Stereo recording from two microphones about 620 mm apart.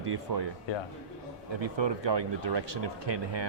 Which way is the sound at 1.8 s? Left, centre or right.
Right.